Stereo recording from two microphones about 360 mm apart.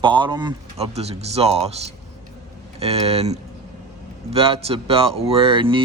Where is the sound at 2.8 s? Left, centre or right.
Centre.